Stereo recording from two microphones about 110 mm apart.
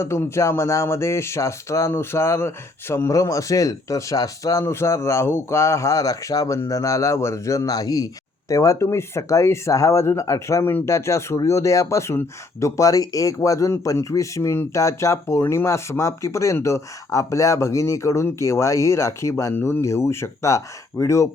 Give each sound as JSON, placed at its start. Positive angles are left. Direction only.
{"t": 0.0, "sound": "speech", "side_deg": 25}